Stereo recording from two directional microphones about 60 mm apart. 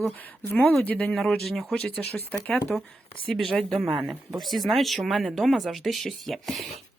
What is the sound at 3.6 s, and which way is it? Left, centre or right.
Speech, centre.